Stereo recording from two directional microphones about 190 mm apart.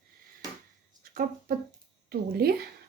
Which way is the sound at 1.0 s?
50° right (ahead or behind).